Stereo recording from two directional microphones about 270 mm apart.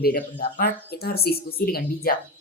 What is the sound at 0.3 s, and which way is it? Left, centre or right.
Speech, left.